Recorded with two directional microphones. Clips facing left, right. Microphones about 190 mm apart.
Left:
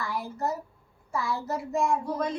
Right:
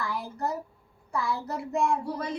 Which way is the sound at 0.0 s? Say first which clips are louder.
Left 1 dB; centre (ahead or behind).